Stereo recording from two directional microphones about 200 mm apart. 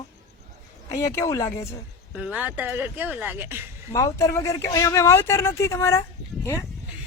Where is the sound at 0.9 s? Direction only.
15° left (ahead or behind).